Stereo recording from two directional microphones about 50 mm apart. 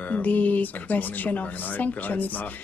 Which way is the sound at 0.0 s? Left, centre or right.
Left.